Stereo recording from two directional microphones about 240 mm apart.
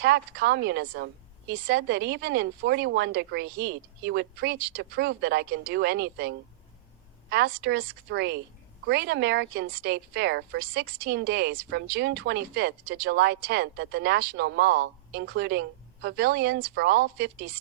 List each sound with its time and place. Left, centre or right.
0.0 s a woman's voice: right